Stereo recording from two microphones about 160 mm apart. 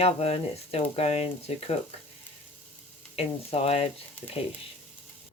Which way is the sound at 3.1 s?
40° left (ahead or behind).